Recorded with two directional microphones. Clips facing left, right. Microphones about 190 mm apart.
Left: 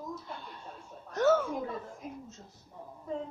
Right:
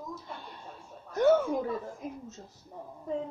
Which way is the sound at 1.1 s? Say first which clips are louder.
Right 2 dB; 15° right (ahead or behind).